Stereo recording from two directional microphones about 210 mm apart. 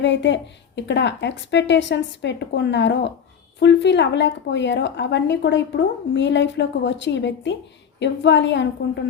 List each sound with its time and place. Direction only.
0.0 s a woman's voice: 60° left (ahead or behind)